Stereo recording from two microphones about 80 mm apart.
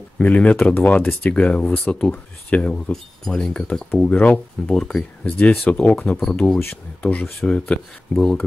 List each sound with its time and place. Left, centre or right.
0.2 s speech: centre
4.7 s speech: centre
5.4 s speech: centre
6.6 s speech: left